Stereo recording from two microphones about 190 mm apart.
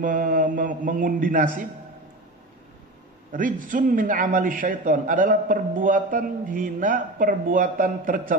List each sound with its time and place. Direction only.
0.0 s a man's voice: 45° right (ahead or behind)
3.3 s a man's voice: 45° right (ahead or behind)